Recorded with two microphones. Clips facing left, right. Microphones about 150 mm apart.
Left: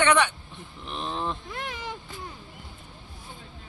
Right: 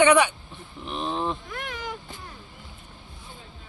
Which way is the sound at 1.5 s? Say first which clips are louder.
Right 1 dB; 20° left (ahead or behind).